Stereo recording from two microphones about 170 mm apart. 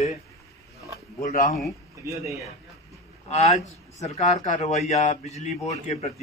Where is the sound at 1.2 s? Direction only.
55° left (ahead or behind).